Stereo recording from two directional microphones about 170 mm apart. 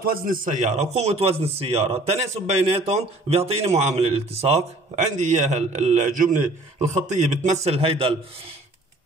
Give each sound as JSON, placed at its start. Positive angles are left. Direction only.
{"t": 0.0, "sound": "a man's voice", "side_deg": -55}